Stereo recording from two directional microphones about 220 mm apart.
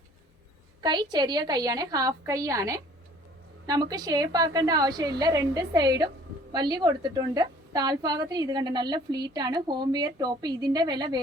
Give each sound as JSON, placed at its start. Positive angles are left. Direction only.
{"t": 0.8, "sound": "a woman's voice", "side_deg": -20}